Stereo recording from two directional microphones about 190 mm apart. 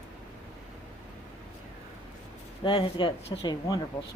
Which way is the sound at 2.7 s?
30° left (ahead or behind).